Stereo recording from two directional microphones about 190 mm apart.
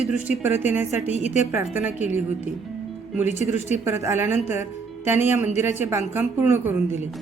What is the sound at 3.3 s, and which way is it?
Speech, 35° left (ahead or behind).